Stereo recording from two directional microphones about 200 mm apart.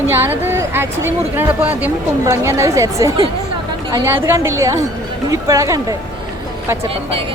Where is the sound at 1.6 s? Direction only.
10° right (ahead or behind).